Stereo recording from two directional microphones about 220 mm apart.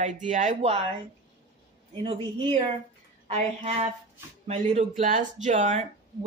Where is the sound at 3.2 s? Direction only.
30° right (ahead or behind).